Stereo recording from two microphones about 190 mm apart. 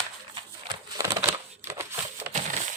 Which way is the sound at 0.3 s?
25° right (ahead or behind).